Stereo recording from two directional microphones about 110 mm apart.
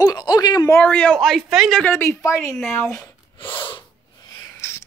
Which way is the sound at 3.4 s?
50° left (ahead or behind).